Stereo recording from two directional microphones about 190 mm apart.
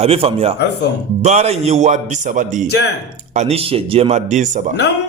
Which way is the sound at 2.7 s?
60° left (ahead or behind).